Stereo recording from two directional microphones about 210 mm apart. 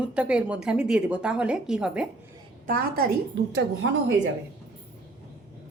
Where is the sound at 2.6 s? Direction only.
45° right (ahead or behind).